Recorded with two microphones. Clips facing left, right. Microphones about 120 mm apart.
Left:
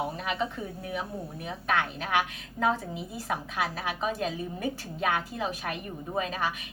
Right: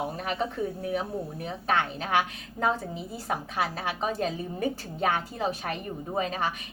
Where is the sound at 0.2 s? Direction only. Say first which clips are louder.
Right 2 dB; 40° right (ahead or behind).